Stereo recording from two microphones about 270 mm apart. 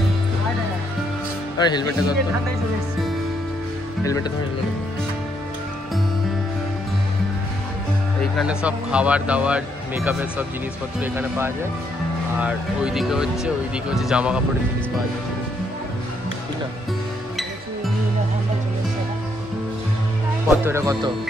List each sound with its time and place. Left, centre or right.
1.6 s speech: centre
4.0 s speech: centre
8.2 s speech: centre
20.4 s speech: centre